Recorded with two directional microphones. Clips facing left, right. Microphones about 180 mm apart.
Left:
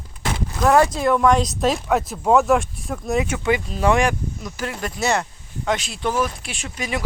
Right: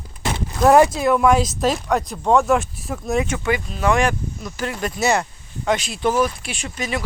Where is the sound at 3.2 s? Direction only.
10° left (ahead or behind).